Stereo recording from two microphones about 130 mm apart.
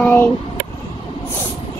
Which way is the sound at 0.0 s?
10° left (ahead or behind).